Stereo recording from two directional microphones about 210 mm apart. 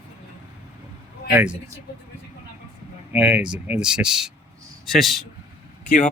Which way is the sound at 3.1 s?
5° right (ahead or behind).